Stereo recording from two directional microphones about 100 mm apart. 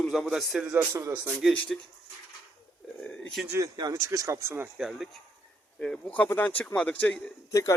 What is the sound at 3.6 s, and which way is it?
Speech, 35° right (ahead or behind).